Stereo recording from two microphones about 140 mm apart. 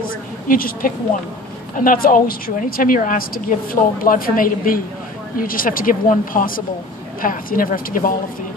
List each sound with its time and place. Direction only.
0.5 s a woman's voice: 85° left